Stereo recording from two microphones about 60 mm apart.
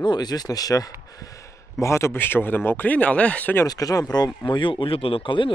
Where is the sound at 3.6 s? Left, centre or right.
Left.